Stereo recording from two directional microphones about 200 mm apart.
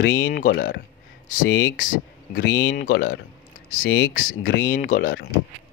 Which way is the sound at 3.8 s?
70° left (ahead or behind).